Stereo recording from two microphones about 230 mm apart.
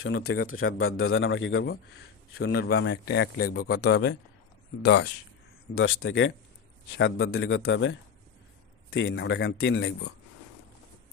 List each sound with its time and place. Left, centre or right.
0.2 s a man's voice: left
0.4 s a man's voice: left
5.7 s a man's voice: left